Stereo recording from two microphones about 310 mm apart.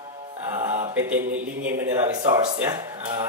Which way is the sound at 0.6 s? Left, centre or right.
Centre.